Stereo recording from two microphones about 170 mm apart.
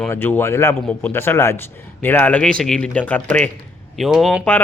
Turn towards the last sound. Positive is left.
turn(degrees=0)  # may be behind; listen again after turning